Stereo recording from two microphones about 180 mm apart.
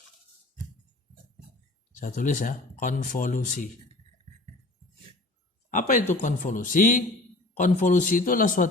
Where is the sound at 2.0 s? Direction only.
45° left (ahead or behind).